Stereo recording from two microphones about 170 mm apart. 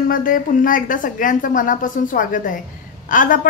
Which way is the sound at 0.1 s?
55° left (ahead or behind).